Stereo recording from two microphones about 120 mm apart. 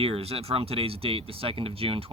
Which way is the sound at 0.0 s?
55° right (ahead or behind).